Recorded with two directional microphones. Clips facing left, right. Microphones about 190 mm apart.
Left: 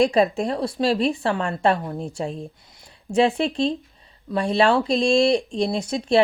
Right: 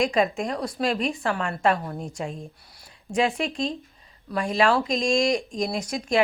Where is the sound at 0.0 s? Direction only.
35° left (ahead or behind).